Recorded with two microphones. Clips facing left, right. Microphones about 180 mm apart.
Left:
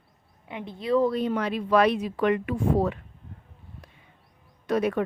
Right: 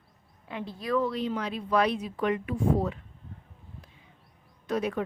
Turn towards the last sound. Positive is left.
turn(degrees=65)  # may be behind; listen again after turning